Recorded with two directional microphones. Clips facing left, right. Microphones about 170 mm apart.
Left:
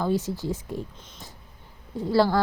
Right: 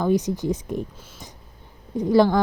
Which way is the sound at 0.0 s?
15° right (ahead or behind).